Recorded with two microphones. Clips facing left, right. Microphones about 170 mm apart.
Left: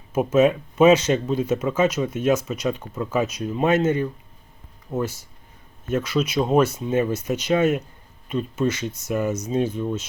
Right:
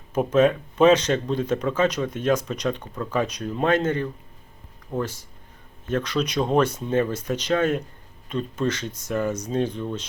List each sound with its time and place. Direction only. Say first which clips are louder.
0.1 s speech: left 1 dB; 5° left (ahead or behind)